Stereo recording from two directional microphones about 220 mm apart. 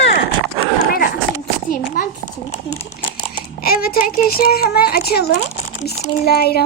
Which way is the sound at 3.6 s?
40° left (ahead or behind).